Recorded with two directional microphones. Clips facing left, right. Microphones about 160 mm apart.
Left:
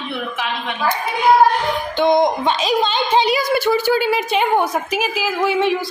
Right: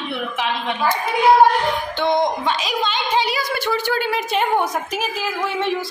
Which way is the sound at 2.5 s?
30° left (ahead or behind).